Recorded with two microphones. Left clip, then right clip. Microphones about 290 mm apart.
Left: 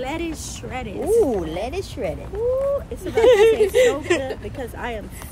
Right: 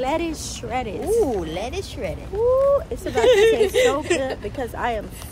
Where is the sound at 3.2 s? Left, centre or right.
Left.